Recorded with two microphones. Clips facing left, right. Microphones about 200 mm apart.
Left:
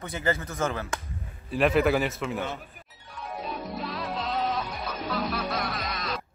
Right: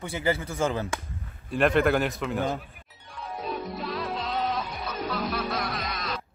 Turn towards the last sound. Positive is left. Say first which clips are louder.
# even
turn(degrees=0)  # may be behind; listen again after turning